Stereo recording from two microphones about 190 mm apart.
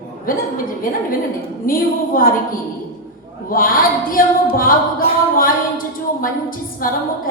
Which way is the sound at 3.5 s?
50° left (ahead or behind).